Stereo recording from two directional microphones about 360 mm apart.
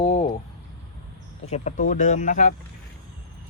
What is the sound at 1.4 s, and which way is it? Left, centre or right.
Speech, centre.